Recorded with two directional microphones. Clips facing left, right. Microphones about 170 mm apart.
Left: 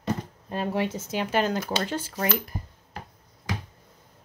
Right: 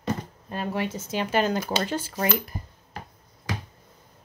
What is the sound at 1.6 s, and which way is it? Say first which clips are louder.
Speech: right 1 dB; 15° right (ahead or behind).